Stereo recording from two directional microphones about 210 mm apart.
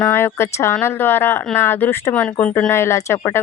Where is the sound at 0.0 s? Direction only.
10° left (ahead or behind).